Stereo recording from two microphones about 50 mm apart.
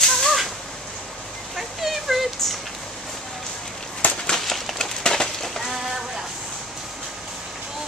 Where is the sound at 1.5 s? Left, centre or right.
Centre.